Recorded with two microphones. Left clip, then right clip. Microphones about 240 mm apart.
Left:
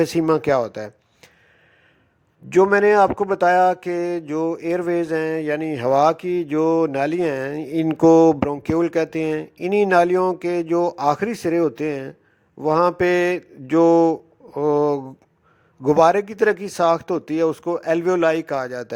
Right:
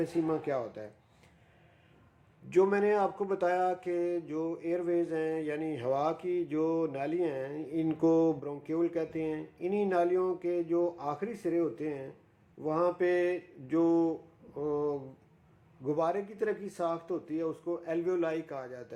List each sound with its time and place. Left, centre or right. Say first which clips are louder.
0.0 s speech: left 13 dB; left
2.5 s speech: left 12 dB; left